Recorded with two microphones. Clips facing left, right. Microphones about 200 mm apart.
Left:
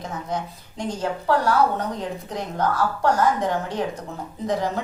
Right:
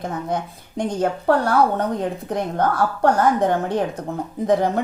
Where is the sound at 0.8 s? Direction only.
55° right (ahead or behind).